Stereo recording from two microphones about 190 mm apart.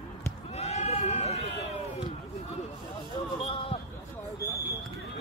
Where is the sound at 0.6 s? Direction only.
35° left (ahead or behind).